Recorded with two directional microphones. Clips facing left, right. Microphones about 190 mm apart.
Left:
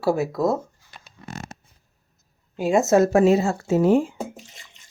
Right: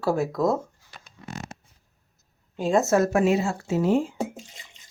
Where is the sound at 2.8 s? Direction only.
25° left (ahead or behind); by 4.0 s 50° left (ahead or behind).